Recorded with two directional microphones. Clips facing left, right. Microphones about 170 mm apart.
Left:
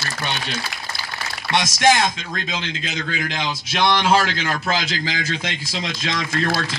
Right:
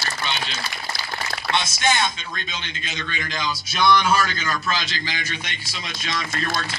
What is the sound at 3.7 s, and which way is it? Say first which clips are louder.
Speech: left 2 dB; 70° left (ahead or behind).